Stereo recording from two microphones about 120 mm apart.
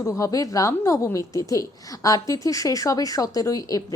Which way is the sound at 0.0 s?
25° left (ahead or behind).